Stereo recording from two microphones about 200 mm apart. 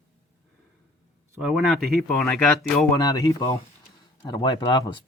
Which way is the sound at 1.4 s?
Centre (ahead or behind).